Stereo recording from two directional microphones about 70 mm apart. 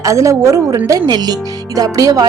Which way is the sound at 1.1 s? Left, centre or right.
Right.